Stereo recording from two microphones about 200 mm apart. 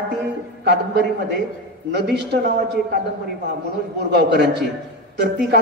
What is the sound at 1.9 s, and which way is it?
Speech, 55° right (ahead or behind).